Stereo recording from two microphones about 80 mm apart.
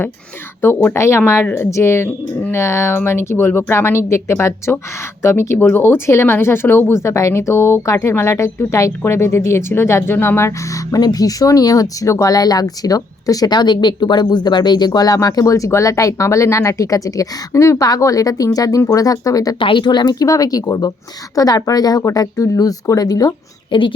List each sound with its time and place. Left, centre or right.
0.6 s speech: left
19.5 s speech: left
20.1 s speech: left
23.7 s a woman's voice: left